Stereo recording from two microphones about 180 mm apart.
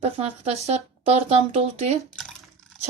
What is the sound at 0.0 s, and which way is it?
Speech, 35° right (ahead or behind).